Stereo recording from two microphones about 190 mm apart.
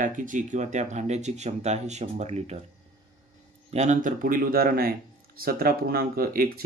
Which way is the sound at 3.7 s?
40° right (ahead or behind).